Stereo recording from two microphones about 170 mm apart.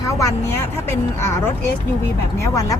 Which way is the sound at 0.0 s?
20° left (ahead or behind).